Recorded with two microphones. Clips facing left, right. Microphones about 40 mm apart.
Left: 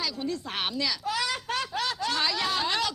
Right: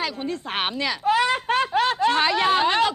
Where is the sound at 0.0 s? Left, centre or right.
Right.